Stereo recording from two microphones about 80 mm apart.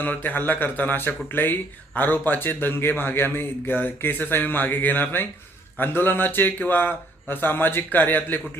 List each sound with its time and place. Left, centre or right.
0.0 s a man's voice: left